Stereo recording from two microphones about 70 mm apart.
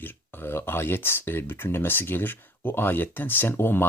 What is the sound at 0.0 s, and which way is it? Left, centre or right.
Speech, left.